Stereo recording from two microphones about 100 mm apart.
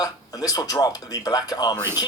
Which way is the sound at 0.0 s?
40° left (ahead or behind).